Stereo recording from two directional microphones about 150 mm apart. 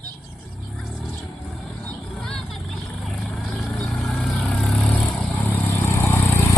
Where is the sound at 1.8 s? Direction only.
5° left (ahead or behind).